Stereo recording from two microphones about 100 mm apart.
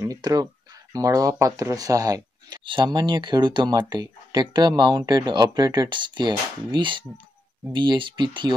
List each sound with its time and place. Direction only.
0.0 s speech: 35° right (ahead or behind)
2.6 s speech: 50° right (ahead or behind)